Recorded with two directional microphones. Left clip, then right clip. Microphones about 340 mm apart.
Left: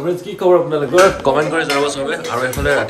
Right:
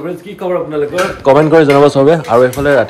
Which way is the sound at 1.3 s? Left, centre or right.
Centre.